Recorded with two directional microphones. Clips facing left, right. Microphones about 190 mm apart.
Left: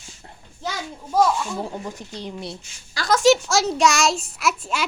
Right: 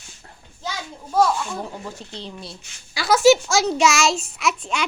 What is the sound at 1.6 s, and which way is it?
Speech, 20° left (ahead or behind).